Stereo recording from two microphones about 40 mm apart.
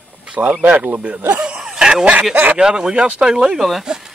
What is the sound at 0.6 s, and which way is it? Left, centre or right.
Speech, right.